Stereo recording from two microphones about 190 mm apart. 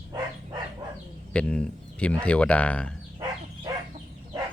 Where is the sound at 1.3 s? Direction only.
5° left (ahead or behind).